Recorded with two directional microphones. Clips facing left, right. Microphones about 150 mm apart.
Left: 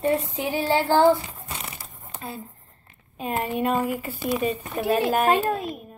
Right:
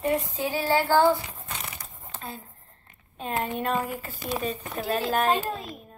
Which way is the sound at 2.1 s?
5° left (ahead or behind).